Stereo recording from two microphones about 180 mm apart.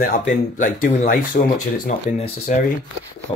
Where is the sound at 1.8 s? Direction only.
40° left (ahead or behind).